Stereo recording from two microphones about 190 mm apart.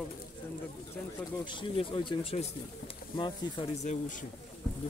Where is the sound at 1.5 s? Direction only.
25° left (ahead or behind).